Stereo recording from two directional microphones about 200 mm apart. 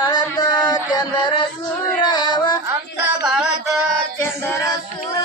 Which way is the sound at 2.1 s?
20° left (ahead or behind).